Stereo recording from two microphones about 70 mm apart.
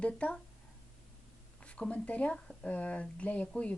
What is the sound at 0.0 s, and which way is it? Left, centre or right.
Speech, centre.